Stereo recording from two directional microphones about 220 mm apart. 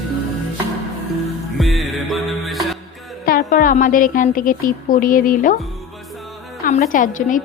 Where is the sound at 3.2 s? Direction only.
40° left (ahead or behind).